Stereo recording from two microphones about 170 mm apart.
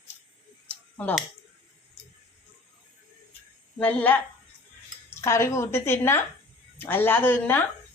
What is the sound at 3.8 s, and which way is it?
Speech, 10° left (ahead or behind).